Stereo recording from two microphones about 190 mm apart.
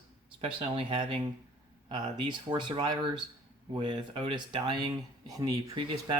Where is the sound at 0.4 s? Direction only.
25° right (ahead or behind).